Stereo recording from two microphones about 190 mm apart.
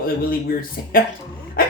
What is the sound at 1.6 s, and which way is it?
Dog, 50° left (ahead or behind).